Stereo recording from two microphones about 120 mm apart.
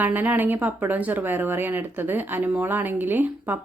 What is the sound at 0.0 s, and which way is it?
Speech, 15° right (ahead or behind).